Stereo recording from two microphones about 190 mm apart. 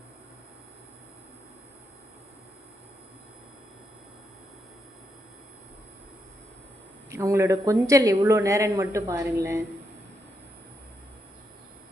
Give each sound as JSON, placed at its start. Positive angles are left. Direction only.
{"t": 7.1, "sound": "speech", "side_deg": -15}